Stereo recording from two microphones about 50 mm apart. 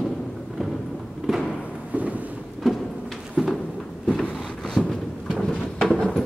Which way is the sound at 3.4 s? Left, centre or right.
Centre.